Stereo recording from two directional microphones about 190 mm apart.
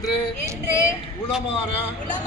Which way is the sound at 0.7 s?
15° left (ahead or behind).